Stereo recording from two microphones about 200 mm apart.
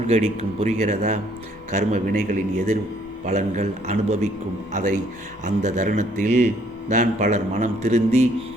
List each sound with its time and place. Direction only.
0.1 s a man's voice: 30° right (ahead or behind)